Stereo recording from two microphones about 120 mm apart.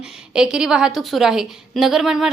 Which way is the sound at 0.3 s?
5° right (ahead or behind).